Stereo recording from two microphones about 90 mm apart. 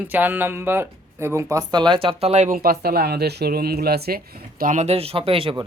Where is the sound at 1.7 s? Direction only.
55° right (ahead or behind).